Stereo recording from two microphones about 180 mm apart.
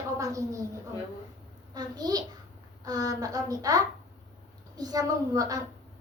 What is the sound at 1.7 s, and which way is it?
A woman's voice, 20° right (ahead or behind).